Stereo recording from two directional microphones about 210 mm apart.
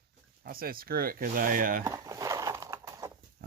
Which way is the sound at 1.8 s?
15° right (ahead or behind).